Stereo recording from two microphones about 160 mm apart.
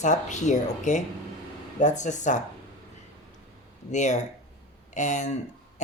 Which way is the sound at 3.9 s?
50° left (ahead or behind).